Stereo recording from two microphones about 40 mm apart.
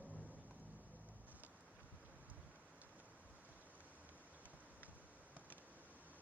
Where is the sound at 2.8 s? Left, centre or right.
Right.